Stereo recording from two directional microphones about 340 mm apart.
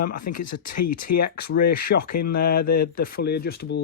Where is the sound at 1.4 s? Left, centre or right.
Left.